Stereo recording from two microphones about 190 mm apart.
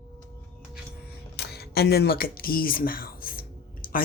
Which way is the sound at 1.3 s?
60° left (ahead or behind).